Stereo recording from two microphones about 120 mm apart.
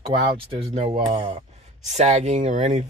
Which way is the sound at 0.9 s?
40° right (ahead or behind).